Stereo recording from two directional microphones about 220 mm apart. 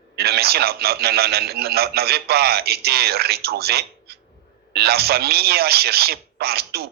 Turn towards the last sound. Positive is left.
turn(degrees=-45)  # may be behind; listen again after turning